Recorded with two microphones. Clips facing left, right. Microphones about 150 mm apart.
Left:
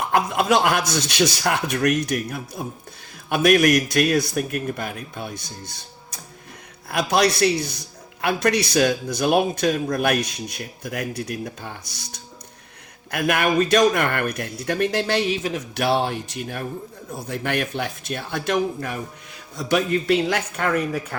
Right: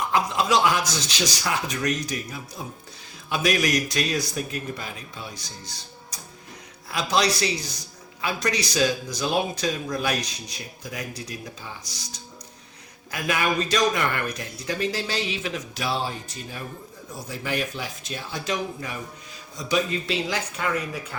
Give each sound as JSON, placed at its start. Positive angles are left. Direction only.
{"t": 0.1, "sound": "speech", "side_deg": 55}
{"t": 15.3, "sound": "a man's voice", "side_deg": 45}
{"t": 15.7, "sound": "speech", "side_deg": 65}